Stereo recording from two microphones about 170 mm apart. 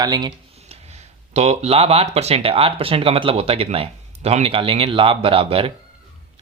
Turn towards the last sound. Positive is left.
turn(degrees=-35)  # may be behind; listen again after turning